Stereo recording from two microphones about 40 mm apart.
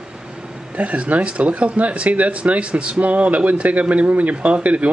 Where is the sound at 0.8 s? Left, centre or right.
Right.